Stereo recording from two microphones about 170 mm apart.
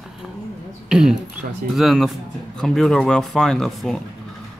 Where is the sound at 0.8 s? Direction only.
5° right (ahead or behind).